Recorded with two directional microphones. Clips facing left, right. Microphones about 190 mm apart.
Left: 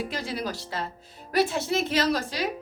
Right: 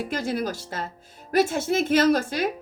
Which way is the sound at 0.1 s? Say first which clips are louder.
Right 5 dB; 50° right (ahead or behind).